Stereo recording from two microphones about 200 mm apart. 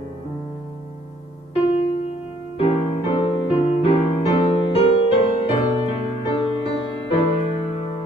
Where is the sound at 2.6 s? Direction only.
30° left (ahead or behind).